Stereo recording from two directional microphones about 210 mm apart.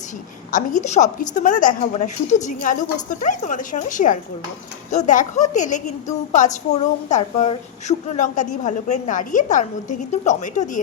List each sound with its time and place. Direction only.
0.5 s a woman's voice: 35° left (ahead or behind)